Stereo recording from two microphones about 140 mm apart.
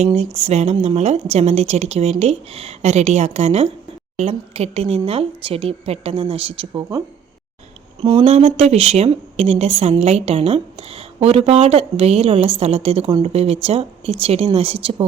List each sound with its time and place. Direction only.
0.0 s speech: 50° right (ahead or behind)
8.0 s speech: 45° right (ahead or behind)